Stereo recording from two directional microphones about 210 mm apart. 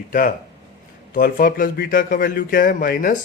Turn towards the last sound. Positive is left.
turn(degrees=45)  # may be behind; listen again after turning